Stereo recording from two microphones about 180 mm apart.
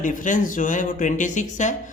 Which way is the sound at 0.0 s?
45° left (ahead or behind).